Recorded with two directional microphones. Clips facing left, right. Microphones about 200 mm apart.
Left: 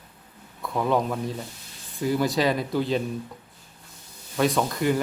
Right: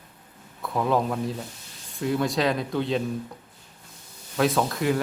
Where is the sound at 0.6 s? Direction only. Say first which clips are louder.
Even; centre (ahead or behind).